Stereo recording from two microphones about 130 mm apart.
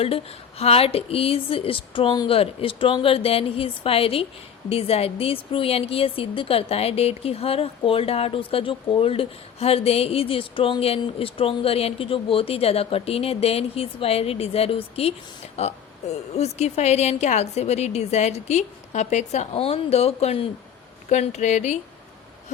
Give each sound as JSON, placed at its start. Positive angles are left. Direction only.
{"t": 0.6, "sound": "a woman's voice", "side_deg": 50}
{"t": 21.1, "sound": "a woman's voice", "side_deg": 65}